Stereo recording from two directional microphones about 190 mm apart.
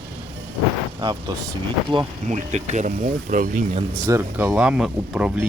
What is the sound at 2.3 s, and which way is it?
Speech, 40° right (ahead or behind).